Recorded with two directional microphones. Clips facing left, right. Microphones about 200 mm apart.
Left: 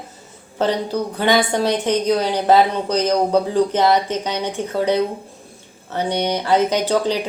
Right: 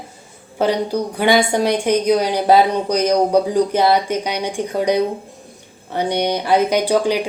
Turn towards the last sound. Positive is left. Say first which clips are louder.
# right 2 dB
turn(degrees=-10)  # may be behind; listen again after turning